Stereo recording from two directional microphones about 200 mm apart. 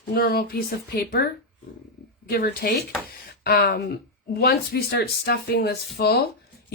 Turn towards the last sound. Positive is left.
turn(degrees=55)  # may be behind; listen again after turning